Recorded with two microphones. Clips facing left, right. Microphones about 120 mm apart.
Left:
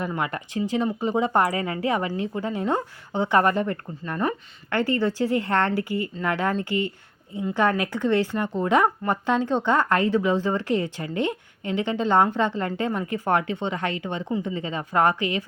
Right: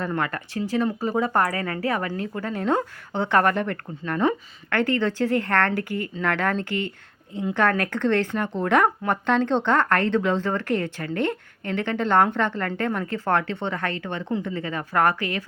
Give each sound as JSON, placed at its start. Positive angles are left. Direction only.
{"t": 0.1, "sound": "speech", "side_deg": 15}